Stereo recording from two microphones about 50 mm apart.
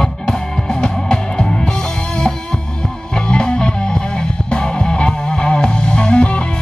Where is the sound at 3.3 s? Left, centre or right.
Centre.